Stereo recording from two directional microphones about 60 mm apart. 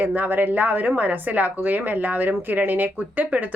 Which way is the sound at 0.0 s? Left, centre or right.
Right.